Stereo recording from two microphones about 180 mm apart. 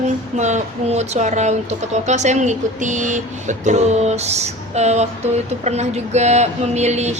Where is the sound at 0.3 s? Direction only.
40° right (ahead or behind).